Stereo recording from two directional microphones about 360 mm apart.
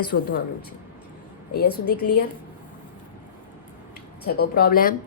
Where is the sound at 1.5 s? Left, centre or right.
Left.